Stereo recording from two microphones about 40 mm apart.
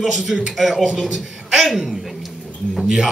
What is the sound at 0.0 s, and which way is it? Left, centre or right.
Speech, centre.